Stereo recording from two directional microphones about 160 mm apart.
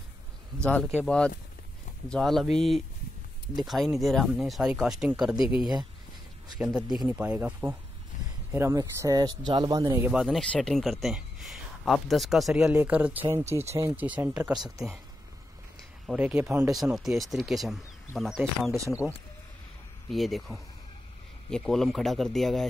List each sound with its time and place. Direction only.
1.0 s speech: 5° left (ahead or behind)
6.6 s speech: 5° right (ahead or behind)
8.1 s a sound: 50° left (ahead or behind)
8.5 s speech: 15° right (ahead or behind)
14.0 s speech: 10° right (ahead or behind)
14.5 s speech: 25° right (ahead or behind)
16.1 s speech: 10° right (ahead or behind)
20.1 s speech: centre (ahead or behind)